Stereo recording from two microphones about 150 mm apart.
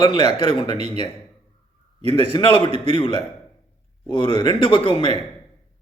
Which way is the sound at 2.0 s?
40° right (ahead or behind).